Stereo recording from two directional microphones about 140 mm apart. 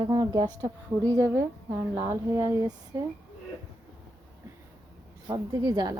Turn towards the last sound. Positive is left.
turn(degrees=-30)  # may be behind; listen again after turning